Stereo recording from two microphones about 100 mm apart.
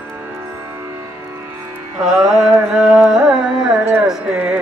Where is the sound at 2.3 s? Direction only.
5° right (ahead or behind).